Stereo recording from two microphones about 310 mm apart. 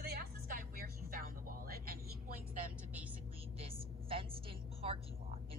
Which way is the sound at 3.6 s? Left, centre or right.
Centre.